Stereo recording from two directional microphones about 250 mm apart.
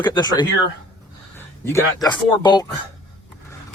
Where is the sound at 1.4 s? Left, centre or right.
Centre.